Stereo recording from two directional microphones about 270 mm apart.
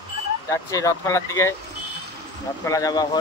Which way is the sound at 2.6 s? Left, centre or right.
Centre.